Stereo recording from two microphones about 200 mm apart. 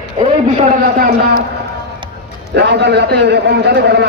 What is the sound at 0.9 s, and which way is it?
Speech, 45° right (ahead or behind).